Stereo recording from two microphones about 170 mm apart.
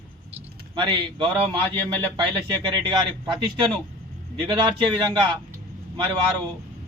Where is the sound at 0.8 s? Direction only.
25° right (ahead or behind).